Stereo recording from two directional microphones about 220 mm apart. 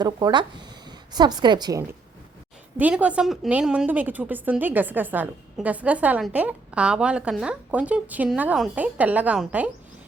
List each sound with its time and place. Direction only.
0.0 s speech: 20° right (ahead or behind)
2.7 s a woman's voice: 5° right (ahead or behind)